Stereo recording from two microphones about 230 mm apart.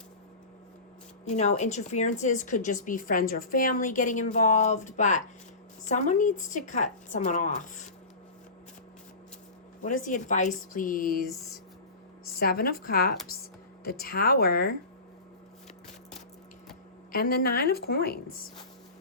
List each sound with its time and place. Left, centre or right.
1.2 s a woman's voice: left
9.8 s a woman's voice: left
17.1 s a woman's voice: left